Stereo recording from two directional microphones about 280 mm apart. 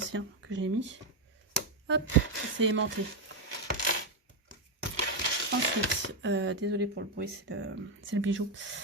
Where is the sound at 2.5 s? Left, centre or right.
Right.